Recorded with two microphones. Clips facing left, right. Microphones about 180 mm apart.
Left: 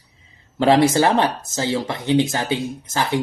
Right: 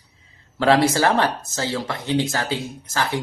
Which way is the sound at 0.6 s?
20° left (ahead or behind).